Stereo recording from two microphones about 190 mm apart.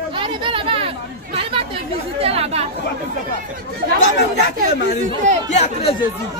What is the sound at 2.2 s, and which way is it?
Speech, 30° right (ahead or behind).